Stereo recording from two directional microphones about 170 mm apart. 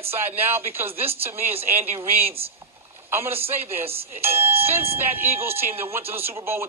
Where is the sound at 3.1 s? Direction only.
15° right (ahead or behind).